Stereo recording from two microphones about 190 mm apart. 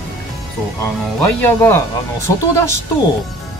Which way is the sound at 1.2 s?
10° left (ahead or behind).